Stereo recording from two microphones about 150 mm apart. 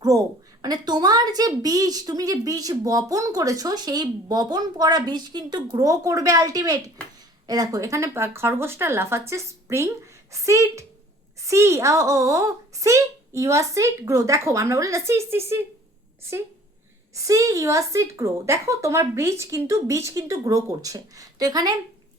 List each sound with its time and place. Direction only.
0.0 s a woman's voice: 25° right (ahead or behind)
17.2 s a woman's voice: 20° right (ahead or behind)